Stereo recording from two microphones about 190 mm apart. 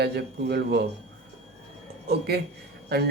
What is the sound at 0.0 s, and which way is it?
Speech, 60° right (ahead or behind).